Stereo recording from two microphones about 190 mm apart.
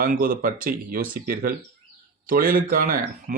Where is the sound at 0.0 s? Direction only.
50° right (ahead or behind).